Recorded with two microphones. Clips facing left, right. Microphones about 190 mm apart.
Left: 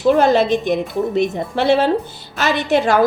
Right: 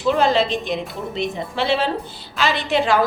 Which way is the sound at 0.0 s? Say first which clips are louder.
Left 4 dB; 45° left (ahead or behind).